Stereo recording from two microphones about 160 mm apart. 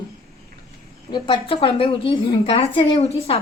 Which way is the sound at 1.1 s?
30° left (ahead or behind).